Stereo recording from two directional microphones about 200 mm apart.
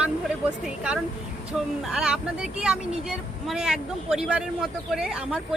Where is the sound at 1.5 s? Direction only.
5° right (ahead or behind).